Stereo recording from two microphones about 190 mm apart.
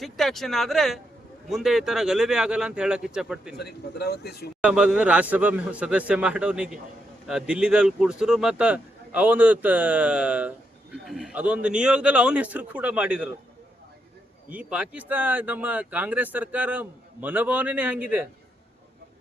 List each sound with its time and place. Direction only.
0.0 s a man's voice: centre (ahead or behind)
3.6 s speech: 55° left (ahead or behind)
4.6 s a man's voice: 5° right (ahead or behind)
14.5 s speech: 5° right (ahead or behind)